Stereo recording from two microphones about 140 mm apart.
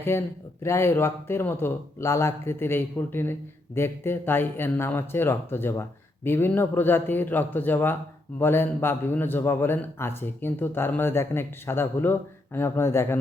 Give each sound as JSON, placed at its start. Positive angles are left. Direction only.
{"t": 0.1, "sound": "a man's voice", "side_deg": 20}